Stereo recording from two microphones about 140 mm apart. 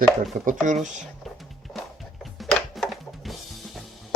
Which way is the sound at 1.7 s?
Centre (ahead or behind).